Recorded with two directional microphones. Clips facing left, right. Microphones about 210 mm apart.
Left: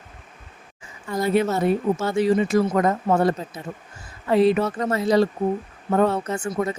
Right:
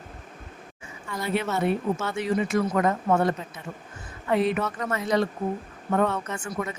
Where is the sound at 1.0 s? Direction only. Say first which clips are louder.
Left 7 dB; 40° left (ahead or behind).